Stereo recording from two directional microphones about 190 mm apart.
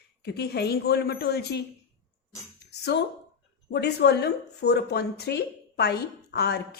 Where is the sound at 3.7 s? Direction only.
65° left (ahead or behind).